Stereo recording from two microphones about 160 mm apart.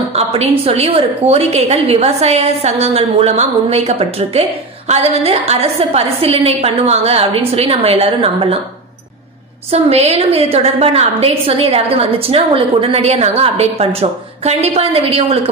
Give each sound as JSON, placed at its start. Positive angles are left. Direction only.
{"t": 0.1, "sound": "a woman's voice", "side_deg": -40}
{"t": 9.7, "sound": "a woman's voice", "side_deg": -40}